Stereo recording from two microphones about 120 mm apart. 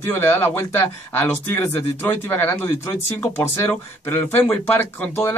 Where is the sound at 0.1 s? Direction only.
20° left (ahead or behind).